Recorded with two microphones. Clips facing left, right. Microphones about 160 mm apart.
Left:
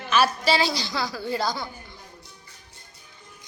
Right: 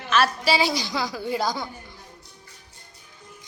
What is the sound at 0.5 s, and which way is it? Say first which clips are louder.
A woman's voice: right 1 dB; 15° right (ahead or behind).